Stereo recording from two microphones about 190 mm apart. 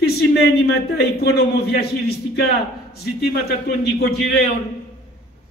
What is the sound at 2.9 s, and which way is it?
A man's voice, 55° left (ahead or behind).